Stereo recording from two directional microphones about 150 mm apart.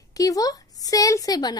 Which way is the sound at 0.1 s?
25° left (ahead or behind).